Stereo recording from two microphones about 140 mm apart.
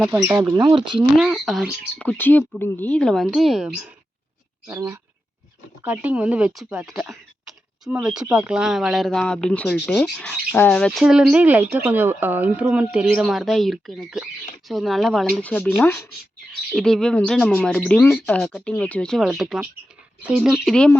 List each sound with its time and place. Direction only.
0.1 s speech: 20° right (ahead or behind)
0.5 s speech: 30° right (ahead or behind)
1.1 s speech: centre (ahead or behind)
4.7 s speech: 20° right (ahead or behind)
5.8 s speech: 10° right (ahead or behind); by 18.4 s 15° left (ahead or behind)
18.4 s speech: centre (ahead or behind)